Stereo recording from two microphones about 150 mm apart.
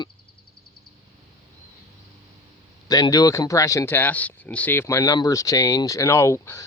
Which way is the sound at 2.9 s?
25° left (ahead or behind).